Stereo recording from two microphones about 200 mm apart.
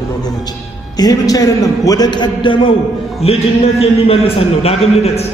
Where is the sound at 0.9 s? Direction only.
20° left (ahead or behind).